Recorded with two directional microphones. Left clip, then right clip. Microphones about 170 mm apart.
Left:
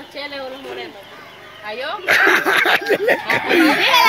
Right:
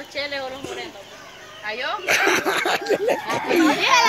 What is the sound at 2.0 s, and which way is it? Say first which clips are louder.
Speech: left 6 dB; centre (ahead or behind).